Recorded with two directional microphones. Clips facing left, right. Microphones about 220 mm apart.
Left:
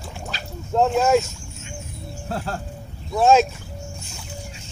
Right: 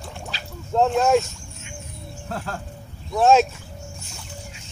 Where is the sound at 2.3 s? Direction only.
35° left (ahead or behind).